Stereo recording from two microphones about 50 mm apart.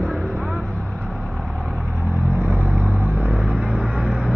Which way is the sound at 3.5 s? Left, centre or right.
Centre.